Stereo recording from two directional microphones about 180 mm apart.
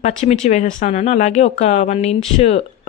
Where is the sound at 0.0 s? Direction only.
40° left (ahead or behind).